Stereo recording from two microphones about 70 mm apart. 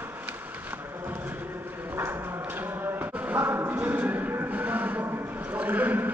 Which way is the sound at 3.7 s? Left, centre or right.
Right.